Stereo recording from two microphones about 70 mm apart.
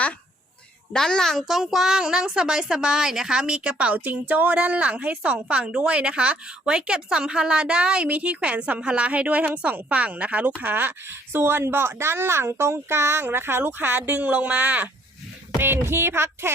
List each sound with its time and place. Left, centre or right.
0.9 s a woman's voice: centre
1.5 s a woman's voice: centre; by 16.5 s right